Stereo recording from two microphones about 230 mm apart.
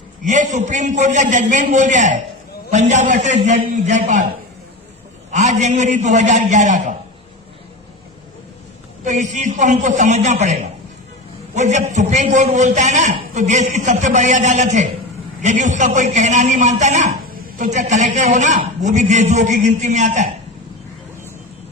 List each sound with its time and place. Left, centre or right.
0.3 s a man's voice: right
5.3 s a man's voice: right
9.0 s a man's voice: right